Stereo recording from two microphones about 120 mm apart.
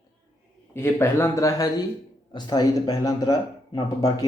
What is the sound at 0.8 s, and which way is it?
Speech, 20° left (ahead or behind).